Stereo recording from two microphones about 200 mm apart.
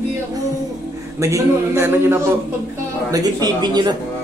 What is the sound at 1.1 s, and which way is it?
Speech, 15° right (ahead or behind).